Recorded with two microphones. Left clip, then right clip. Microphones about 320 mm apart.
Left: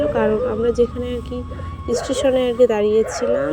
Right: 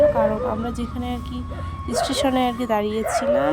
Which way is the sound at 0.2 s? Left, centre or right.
Centre.